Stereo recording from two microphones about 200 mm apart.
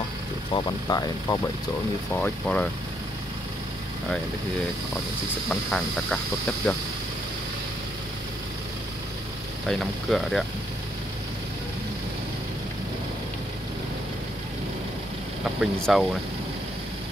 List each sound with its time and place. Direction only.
0.5 s speech: 20° left (ahead or behind)
2.1 s speech: 5° left (ahead or behind)
5.5 s speech: 5° left (ahead or behind)
9.7 s speech: centre (ahead or behind)
15.6 s speech: centre (ahead or behind)